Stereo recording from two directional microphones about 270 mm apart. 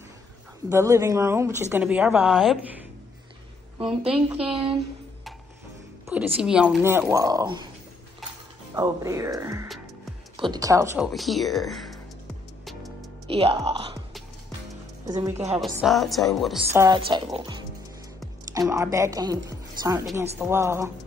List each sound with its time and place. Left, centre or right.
0.7 s speech: centre
4.0 s a woman's voice: centre
6.0 s speech: centre
8.7 s speech: centre
11.1 s a woman's voice: centre
13.3 s speech: right
15.0 s a woman's voice: centre
16.7 s speech: centre